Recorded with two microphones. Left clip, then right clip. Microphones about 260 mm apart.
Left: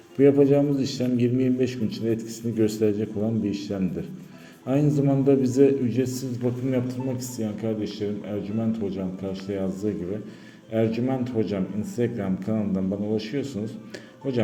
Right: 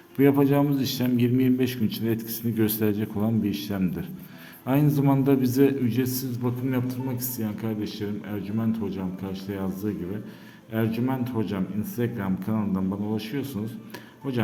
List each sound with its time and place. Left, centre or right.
0.2 s a man's voice: centre
10.7 s a man's voice: centre